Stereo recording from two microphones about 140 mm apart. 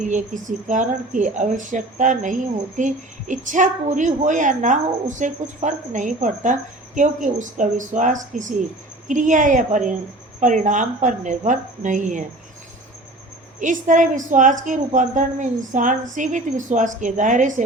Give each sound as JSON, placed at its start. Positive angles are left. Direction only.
{"t": 0.0, "sound": "a woman's voice", "side_deg": -65}
{"t": 13.6, "sound": "a woman's voice", "side_deg": -65}